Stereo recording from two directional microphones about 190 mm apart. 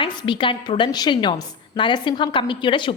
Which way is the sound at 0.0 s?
25° left (ahead or behind).